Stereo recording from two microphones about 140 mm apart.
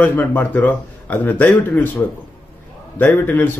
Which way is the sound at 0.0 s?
15° left (ahead or behind).